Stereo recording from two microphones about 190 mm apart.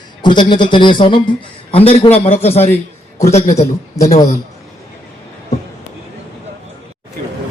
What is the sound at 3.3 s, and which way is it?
Speech, 35° left (ahead or behind).